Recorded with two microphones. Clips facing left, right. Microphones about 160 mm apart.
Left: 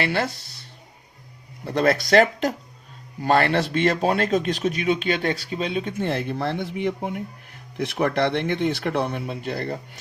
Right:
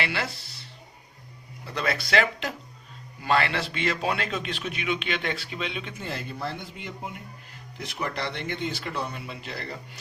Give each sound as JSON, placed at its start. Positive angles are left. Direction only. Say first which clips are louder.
{"t": 0.0, "sound": "a man's voice", "louder": "left 6 dB", "side_deg": 45}
{"t": 1.6, "sound": "a man's voice", "louder": "left 9 dB", "side_deg": 50}
{"t": 6.0, "sound": "speech", "louder": "left 8 dB", "side_deg": 65}